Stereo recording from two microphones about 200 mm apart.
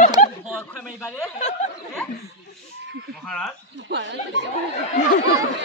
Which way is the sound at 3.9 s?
65° right (ahead or behind).